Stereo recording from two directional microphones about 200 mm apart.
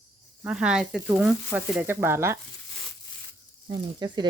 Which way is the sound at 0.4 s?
5° right (ahead or behind).